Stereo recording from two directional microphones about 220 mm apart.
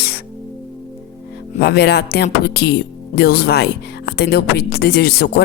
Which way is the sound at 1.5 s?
45° left (ahead or behind).